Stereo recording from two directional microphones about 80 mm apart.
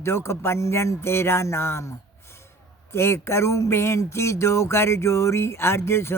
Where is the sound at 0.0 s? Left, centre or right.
Left.